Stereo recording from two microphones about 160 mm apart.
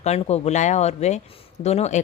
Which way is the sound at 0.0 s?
40° left (ahead or behind).